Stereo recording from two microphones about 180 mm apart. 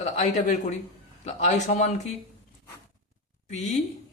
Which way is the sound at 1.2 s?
40° left (ahead or behind).